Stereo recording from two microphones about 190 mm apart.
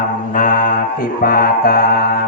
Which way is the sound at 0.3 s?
45° left (ahead or behind).